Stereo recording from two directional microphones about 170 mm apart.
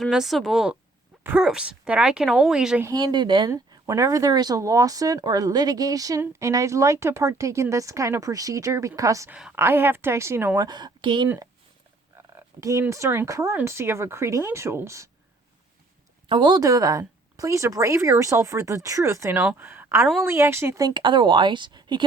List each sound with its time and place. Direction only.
0.0 s speech: centre (ahead or behind)
2.8 s speech: 25° right (ahead or behind)
9.3 s speech: 10° right (ahead or behind)
10.7 s speech: 25° right (ahead or behind)
16.3 s speech: 25° right (ahead or behind)